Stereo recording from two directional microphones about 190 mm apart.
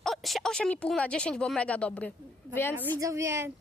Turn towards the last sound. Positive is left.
turn(degrees=-15)  # may be behind; listen again after turning